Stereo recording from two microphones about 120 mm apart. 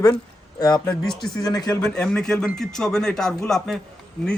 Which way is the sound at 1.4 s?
35° left (ahead or behind).